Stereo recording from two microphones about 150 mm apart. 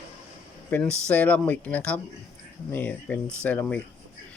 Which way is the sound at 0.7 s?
5° left (ahead or behind).